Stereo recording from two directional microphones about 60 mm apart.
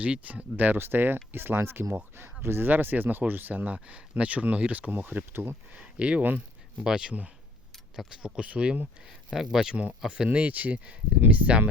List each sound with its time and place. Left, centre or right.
0.0 s speech: right
5.7 s speech: centre
6.8 s speech: centre
8.4 s speech: right
9.0 s speech: centre
10.3 s speech: right